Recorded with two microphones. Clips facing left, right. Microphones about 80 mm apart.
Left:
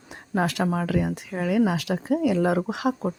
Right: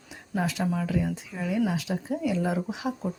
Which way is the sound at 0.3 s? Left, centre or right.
Left.